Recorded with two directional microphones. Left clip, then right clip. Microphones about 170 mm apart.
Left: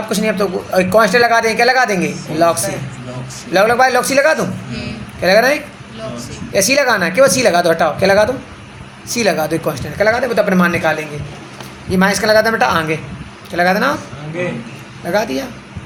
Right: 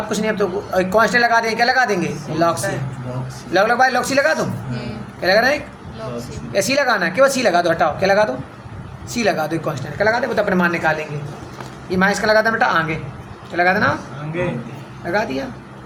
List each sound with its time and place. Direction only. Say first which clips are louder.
0.1 s a man's voice: left 4 dB; 35° left (ahead or behind)
15.0 s a man's voice: left 3 dB; 40° left (ahead or behind)